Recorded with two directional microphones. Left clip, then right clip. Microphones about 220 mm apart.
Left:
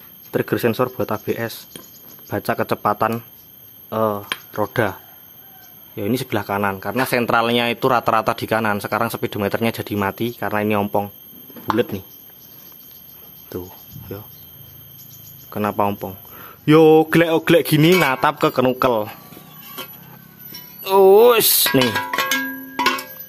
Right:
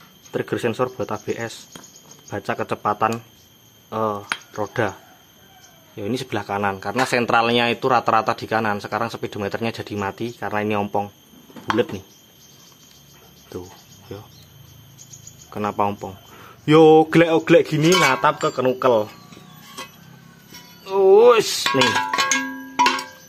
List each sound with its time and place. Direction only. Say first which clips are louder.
0.3 s speech: left 4 dB; 25° left (ahead or behind)
5.9 s speech: left 3 dB; 25° left (ahead or behind)
13.5 s music: left 3 dB; 20° left (ahead or behind)
15.5 s speech: left 2 dB; 20° left (ahead or behind); by 19.0 s 55° left (ahead or behind)
20.8 s speech: left 2 dB; 45° left (ahead or behind)
21.6 s music: even; 5° left (ahead or behind)